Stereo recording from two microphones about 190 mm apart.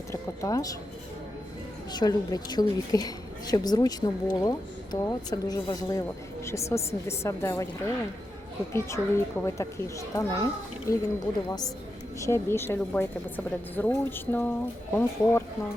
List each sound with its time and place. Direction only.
0.1 s speech: 20° left (ahead or behind)
1.9 s a woman's voice: 20° left (ahead or behind)